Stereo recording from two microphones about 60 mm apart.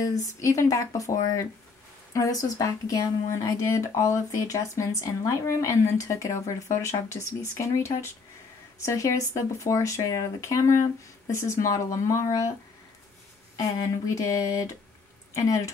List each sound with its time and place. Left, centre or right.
0.0 s a woman's voice: left
13.7 s a woman's voice: left